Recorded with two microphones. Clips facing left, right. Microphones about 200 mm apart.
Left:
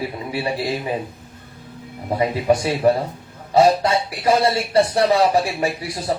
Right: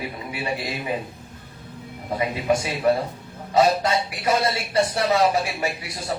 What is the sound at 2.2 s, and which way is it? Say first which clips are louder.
Speech: left 5 dB; 30° left (ahead or behind).